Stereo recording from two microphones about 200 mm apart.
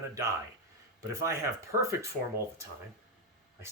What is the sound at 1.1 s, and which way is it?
Speech, 15° right (ahead or behind).